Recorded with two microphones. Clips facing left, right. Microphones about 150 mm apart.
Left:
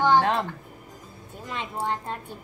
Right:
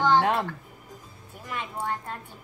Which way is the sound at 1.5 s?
20° left (ahead or behind).